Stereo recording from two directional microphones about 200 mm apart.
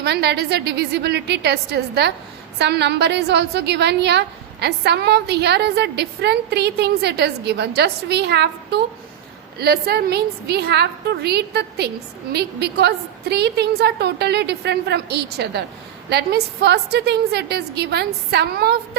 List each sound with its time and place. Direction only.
0.0 s a woman's voice: 55° right (ahead or behind)